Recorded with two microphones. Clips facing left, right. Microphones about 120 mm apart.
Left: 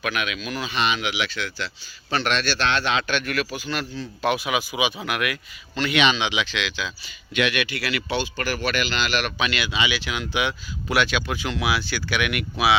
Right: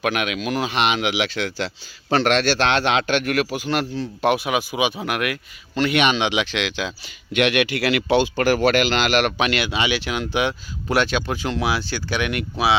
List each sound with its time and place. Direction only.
0.0 s speech: 65° right (ahead or behind); by 12.7 s 30° right (ahead or behind)